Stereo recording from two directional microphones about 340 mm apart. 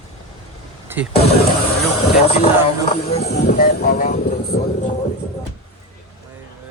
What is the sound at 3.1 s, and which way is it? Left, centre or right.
Speech, left.